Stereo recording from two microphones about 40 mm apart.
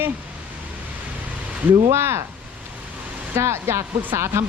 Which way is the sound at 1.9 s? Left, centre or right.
Right.